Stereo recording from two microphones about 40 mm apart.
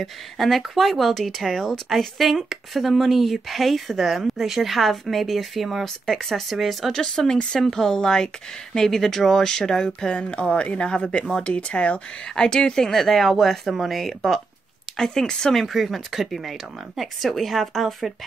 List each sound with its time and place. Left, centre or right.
0.0 s speech: centre
6.0 s speech: centre
6.5 s speech: centre
7.0 s speech: centre; by 12.0 s left
12.4 s speech: centre
15.6 s speech: centre